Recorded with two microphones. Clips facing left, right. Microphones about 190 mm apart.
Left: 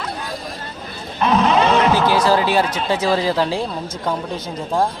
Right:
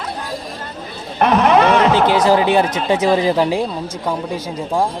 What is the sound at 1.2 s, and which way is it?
Wild animals, 60° right (ahead or behind).